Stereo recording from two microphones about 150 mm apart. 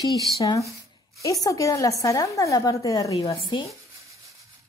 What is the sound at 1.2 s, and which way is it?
A woman's voice, 20° left (ahead or behind).